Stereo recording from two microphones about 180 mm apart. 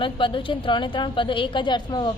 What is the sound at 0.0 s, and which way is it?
A woman's voice, 30° left (ahead or behind).